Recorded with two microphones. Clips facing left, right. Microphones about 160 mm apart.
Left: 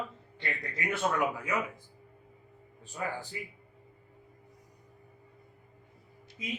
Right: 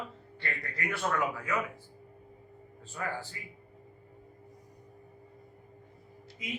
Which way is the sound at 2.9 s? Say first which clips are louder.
Left 1 dB; 15° left (ahead or behind).